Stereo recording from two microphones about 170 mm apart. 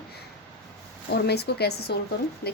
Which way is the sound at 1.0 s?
75° left (ahead or behind).